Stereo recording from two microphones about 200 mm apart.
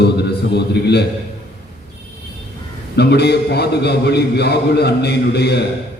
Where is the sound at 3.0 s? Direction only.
55° left (ahead or behind).